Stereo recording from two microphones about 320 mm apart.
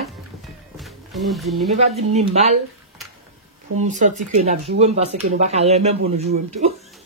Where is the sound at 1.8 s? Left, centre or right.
Centre.